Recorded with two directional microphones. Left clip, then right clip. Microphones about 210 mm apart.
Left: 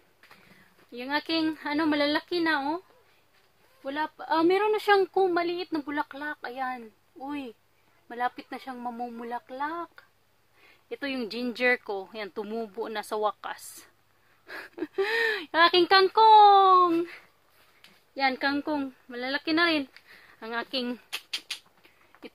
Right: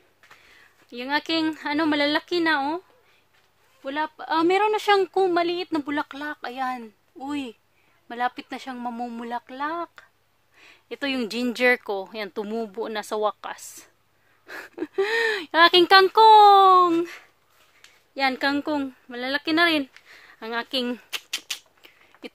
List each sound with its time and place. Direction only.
0.9 s speech: 40° right (ahead or behind)
3.8 s speech: 40° right (ahead or behind)
20.1 s a sound: 35° right (ahead or behind)